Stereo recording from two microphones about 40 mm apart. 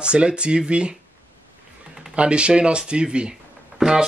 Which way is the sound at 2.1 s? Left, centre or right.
Right.